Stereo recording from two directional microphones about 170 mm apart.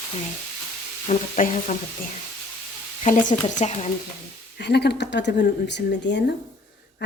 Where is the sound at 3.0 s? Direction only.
50° left (ahead or behind).